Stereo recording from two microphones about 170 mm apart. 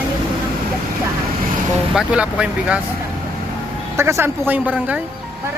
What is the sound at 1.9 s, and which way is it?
Speech, 5° right (ahead or behind).